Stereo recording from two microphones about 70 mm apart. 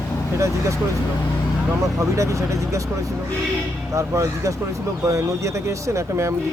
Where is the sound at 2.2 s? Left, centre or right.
Right.